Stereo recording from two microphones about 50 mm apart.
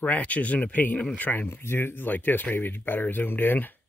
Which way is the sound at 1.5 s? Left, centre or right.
Left.